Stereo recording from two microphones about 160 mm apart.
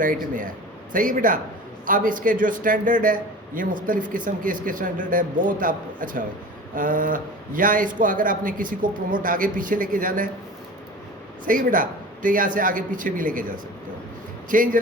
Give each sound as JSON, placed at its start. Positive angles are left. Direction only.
{"t": 0.0, "sound": "a man's voice", "side_deg": -55}
{"t": 11.4, "sound": "a man's voice", "side_deg": -55}
{"t": 14.5, "sound": "a man's voice", "side_deg": -60}